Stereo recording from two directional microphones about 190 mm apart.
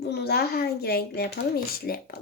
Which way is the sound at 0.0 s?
60° left (ahead or behind).